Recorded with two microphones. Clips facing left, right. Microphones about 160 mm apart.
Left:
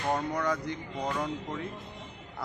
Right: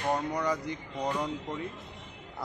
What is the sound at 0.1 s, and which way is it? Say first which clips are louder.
A man's voice: even; 10° right (ahead or behind).